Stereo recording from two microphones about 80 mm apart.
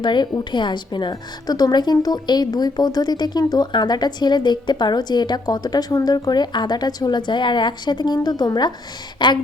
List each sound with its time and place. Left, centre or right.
0.0 s a woman's voice: left
6.1 s a woman's voice: left